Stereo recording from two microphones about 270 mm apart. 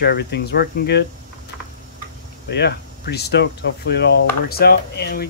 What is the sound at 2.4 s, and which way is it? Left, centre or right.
Speech, left.